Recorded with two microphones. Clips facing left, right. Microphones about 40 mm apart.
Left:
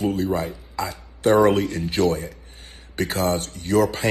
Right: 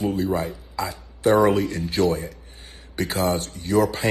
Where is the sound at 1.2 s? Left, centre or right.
Left.